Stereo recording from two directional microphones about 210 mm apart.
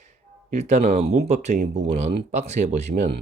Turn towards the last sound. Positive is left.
turn(degrees=-35)  # may be behind; listen again after turning